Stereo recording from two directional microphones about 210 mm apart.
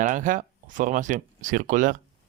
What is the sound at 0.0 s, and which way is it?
Speech, 40° right (ahead or behind).